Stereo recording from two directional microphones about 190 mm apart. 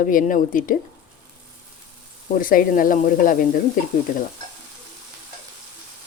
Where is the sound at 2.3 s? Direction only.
45° left (ahead or behind).